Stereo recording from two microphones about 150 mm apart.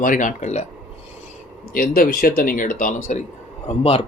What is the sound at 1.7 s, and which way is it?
Speech, 85° left.